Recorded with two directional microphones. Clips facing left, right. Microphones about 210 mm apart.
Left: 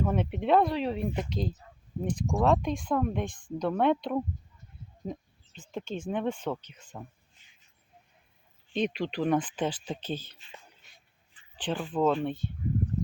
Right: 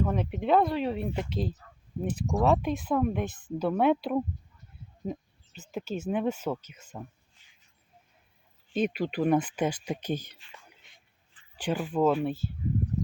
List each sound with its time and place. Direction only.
0.0 s speech: centre (ahead or behind)
7.4 s a sound: 20° left (ahead or behind)
8.7 s speech: 5° right (ahead or behind)
11.5 s speech: 10° right (ahead or behind)